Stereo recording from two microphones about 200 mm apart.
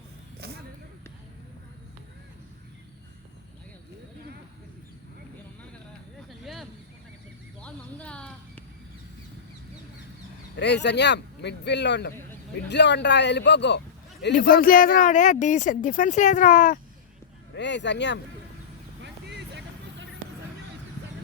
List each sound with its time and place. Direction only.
0.3 s vehicle: 55° right (ahead or behind)
6.4 s a sound: centre (ahead or behind)
10.6 s a man's voice: 60° left (ahead or behind)
14.3 s speech: 45° left (ahead or behind)
17.5 s speech: 60° left (ahead or behind)
19.0 s vehicle: 60° right (ahead or behind)